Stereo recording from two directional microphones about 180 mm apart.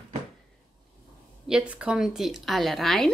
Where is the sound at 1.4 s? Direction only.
5° right (ahead or behind).